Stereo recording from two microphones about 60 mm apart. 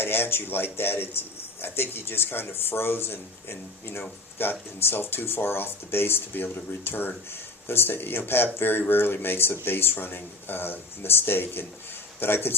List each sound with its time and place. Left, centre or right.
0.0 s speech: left